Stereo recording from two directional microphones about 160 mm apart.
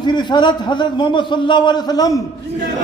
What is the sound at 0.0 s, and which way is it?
A man's voice, 25° left (ahead or behind).